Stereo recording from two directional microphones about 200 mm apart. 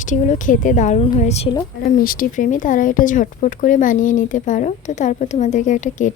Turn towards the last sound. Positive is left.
turn(degrees=40)  # may be behind; listen again after turning